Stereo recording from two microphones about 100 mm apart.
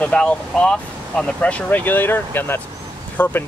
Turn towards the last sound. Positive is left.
turn(degrees=20)  # may be behind; listen again after turning